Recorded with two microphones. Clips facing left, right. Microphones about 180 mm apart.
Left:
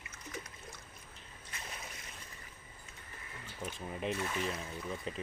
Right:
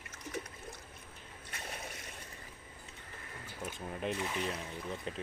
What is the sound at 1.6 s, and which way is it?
Slosh, 55° right (ahead or behind).